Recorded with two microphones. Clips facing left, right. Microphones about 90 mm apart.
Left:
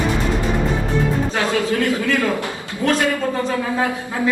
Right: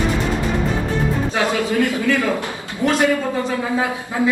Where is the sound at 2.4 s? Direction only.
20° right (ahead or behind).